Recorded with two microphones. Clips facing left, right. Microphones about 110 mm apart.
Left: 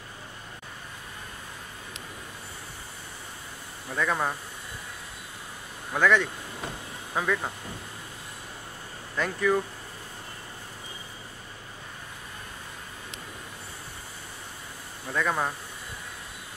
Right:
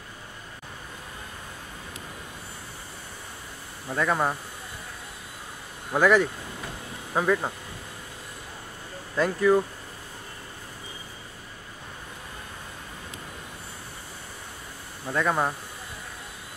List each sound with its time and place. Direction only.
3.9 s speech: 15° right (ahead or behind)
5.9 s speech: 10° right (ahead or behind)
9.1 s speech: 10° right (ahead or behind)
15.1 s speech: 15° right (ahead or behind)